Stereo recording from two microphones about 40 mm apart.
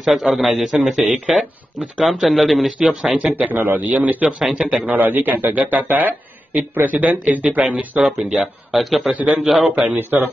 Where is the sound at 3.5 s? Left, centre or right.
Right.